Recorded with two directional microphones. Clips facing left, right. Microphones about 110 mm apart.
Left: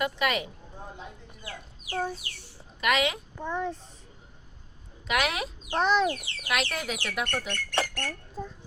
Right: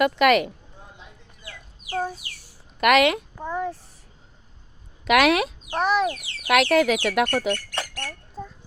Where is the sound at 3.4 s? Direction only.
10° right (ahead or behind).